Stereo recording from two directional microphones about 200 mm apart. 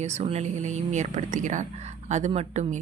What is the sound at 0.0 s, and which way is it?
Speech, 35° right (ahead or behind).